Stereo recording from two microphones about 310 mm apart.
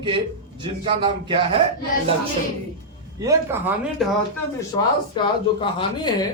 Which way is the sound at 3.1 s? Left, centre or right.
Centre.